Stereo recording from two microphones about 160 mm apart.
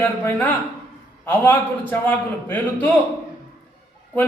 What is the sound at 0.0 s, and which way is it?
A man's voice, 10° left (ahead or behind).